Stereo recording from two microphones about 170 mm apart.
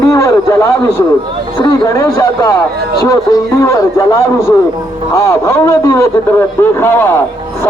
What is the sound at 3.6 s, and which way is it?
Speech, 20° left (ahead or behind).